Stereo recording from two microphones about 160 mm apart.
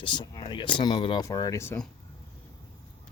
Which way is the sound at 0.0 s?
30° left (ahead or behind).